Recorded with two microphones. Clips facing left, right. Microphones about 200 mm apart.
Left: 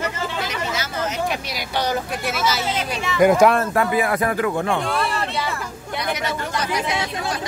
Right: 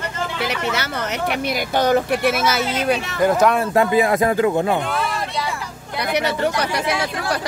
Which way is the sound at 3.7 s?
25° right (ahead or behind).